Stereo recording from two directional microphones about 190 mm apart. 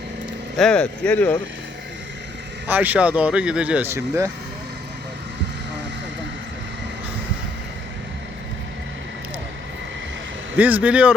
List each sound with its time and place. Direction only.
0.5 s speech: 5° left (ahead or behind)
2.6 s speech: 10° right (ahead or behind)
10.6 s speech: 10° right (ahead or behind)